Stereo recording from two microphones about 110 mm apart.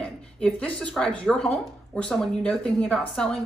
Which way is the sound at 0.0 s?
10° left (ahead or behind).